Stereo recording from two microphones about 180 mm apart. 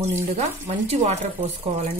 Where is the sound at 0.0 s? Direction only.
35° right (ahead or behind).